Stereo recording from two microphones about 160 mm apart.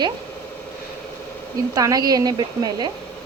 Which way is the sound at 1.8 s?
25° right (ahead or behind).